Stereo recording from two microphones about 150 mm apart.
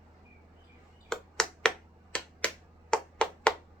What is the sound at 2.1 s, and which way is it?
Finger snapping, 5° left (ahead or behind).